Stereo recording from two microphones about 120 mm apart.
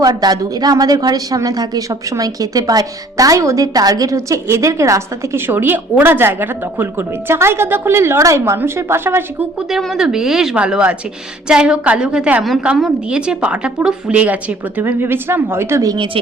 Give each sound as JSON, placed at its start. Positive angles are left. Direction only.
{"t": 0.0, "sound": "a woman's voice", "side_deg": -30}
{"t": 9.6, "sound": "a woman's voice", "side_deg": -5}